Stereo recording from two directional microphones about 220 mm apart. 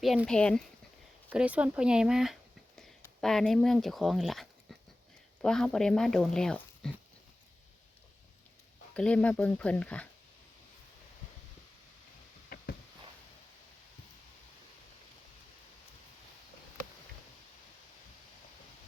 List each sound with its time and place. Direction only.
0.0 s speech: centre (ahead or behind)
9.0 s speech: 5° left (ahead or behind)
12.5 s a sound: 45° left (ahead or behind)